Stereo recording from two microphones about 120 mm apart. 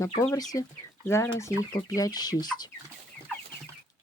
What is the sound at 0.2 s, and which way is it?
Speech, 25° left (ahead or behind).